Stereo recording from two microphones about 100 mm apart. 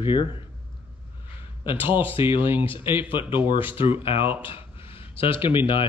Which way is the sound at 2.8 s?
20° right (ahead or behind).